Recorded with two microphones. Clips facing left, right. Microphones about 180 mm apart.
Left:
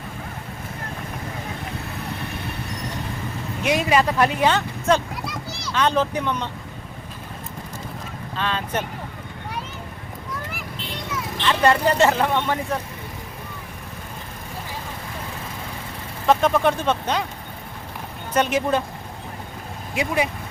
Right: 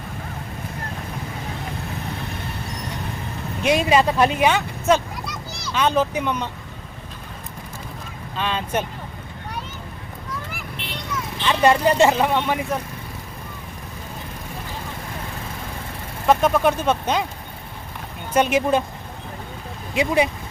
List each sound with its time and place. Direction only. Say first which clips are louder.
3.6 s speech: right 2 dB; 25° right (ahead or behind)
5.2 s a sound: left 1 dB; centre (ahead or behind)
5.7 s speech: right 1 dB; 10° right (ahead or behind)
8.4 s speech: right 2 dB; 15° right (ahead or behind)
10.8 s vehicle: left 1 dB; 65° right (ahead or behind)
11.4 s speech: right 2 dB; 15° right (ahead or behind)
16.2 s speech: right 1 dB; 5° right (ahead or behind)
18.3 s speech: right 2 dB; 10° right (ahead or behind)
19.9 s speech: right 4 dB; 25° right (ahead or behind)